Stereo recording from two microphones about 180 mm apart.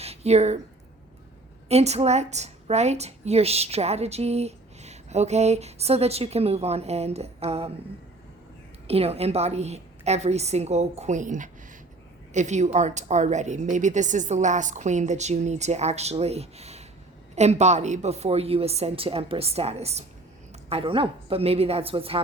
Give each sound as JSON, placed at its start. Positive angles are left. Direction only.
{"t": 0.0, "sound": "a sound", "side_deg": -35}
{"t": 1.6, "sound": "a woman's voice", "side_deg": -35}
{"t": 8.9, "sound": "a woman's voice", "side_deg": -35}